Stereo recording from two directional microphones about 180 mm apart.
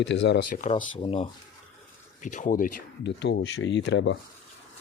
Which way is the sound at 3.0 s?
70° left (ahead or behind).